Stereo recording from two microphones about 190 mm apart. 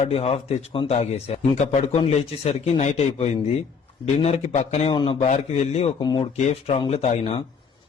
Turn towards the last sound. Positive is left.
turn(degrees=30)  # may be behind; listen again after turning